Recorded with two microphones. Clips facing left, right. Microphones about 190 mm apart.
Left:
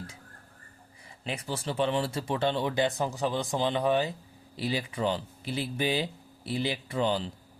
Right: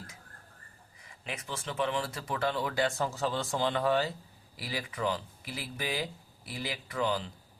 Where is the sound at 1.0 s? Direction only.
35° left (ahead or behind).